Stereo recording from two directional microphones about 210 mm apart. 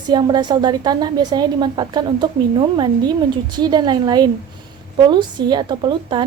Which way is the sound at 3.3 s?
20° right (ahead or behind).